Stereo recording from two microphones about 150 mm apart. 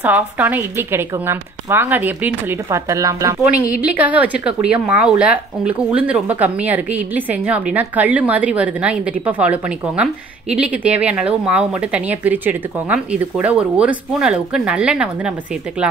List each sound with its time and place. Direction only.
0.0 s speech: 10° right (ahead or behind)
2.9 s speech: 20° right (ahead or behind)
3.7 s speech: 10° right (ahead or behind)